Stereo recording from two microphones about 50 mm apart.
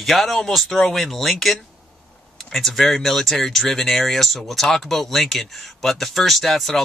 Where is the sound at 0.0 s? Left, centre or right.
Centre.